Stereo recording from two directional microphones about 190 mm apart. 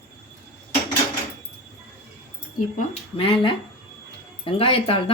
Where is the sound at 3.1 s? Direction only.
30° left (ahead or behind).